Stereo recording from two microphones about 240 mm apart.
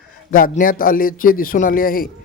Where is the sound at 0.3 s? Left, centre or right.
Left.